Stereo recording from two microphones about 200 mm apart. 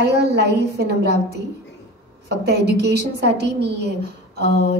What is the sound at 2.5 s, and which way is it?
A woman's voice, 55° right (ahead or behind).